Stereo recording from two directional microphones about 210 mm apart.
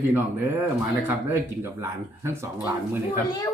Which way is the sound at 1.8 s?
10° right (ahead or behind).